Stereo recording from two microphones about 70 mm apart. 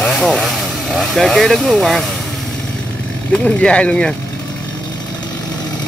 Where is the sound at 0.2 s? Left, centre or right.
Centre.